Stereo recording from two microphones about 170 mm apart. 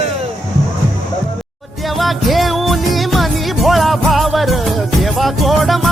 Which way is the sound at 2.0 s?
Centre (ahead or behind).